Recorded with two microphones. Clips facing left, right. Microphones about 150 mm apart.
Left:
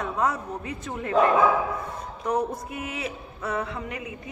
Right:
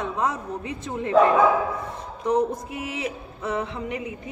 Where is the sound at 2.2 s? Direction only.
25° right (ahead or behind).